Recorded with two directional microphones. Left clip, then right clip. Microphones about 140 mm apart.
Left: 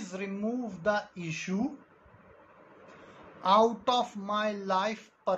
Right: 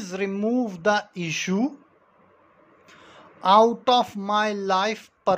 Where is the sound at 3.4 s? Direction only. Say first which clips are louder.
Right 7 dB; 70° right (ahead or behind).